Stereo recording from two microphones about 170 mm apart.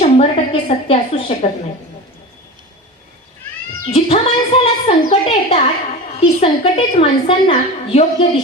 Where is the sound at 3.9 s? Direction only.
35° left (ahead or behind).